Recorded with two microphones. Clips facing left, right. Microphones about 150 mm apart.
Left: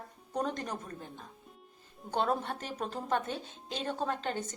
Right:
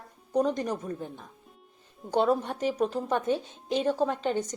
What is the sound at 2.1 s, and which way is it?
A woman's voice, 15° right (ahead or behind).